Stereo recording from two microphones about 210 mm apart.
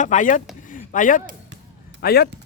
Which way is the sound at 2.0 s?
50° left (ahead or behind).